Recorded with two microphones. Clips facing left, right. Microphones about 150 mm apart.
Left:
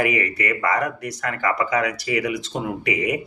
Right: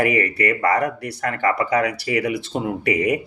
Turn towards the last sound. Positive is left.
turn(degrees=-35)  # may be behind; listen again after turning